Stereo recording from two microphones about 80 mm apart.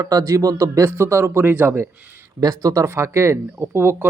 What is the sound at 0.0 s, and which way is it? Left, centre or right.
Speech, right.